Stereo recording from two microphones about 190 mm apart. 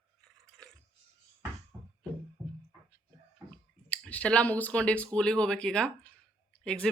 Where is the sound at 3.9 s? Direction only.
10° left (ahead or behind).